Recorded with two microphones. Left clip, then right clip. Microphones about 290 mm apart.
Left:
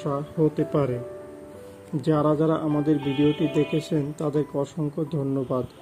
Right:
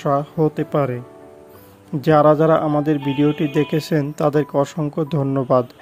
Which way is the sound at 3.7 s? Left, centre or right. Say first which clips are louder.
Right 6 dB; right.